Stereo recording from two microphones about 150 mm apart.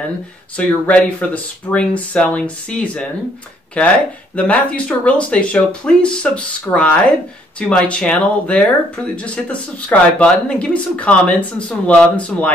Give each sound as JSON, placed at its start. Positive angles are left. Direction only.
{"t": 0.6, "sound": "speech", "side_deg": 10}